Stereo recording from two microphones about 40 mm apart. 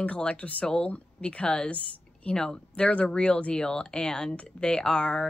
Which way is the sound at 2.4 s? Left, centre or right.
Centre.